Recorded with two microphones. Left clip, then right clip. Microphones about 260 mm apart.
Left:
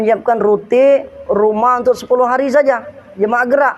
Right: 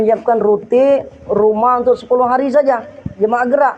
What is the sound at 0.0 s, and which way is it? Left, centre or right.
Speech, left.